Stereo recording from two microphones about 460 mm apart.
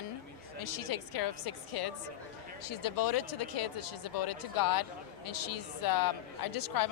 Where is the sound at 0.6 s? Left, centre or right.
Left.